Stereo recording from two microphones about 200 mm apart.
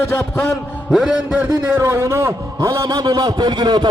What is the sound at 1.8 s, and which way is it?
A man's voice, 15° right (ahead or behind).